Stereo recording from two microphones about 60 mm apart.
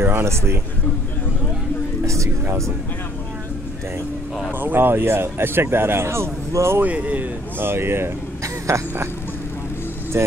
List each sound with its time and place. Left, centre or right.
0.0 s speech: right
2.0 s music: right
4.6 s speech: right
6.8 s speech: right
7.5 s speech: right
8.7 s a sound: right
10.1 s speech: right